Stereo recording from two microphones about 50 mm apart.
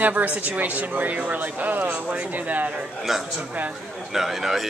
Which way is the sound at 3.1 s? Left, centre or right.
Centre.